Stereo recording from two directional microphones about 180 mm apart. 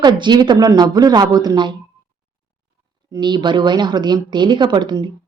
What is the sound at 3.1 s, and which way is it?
A woman's voice, 25° right (ahead or behind).